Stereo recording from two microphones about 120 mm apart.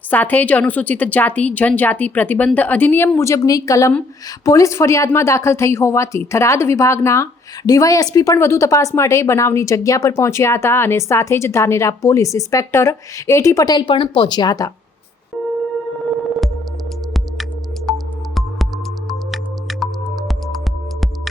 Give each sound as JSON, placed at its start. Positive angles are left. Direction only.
{"t": 0.1, "sound": "a woman's voice", "side_deg": 15}
{"t": 13.7, "sound": "speech", "side_deg": 45}
{"t": 17.8, "sound": "music", "side_deg": 0}